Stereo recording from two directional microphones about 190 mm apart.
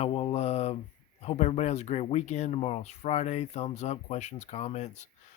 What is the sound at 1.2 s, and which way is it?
Speech, 35° left (ahead or behind).